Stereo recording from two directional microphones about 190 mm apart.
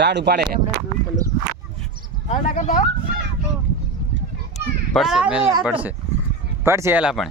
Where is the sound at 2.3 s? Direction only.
40° left (ahead or behind).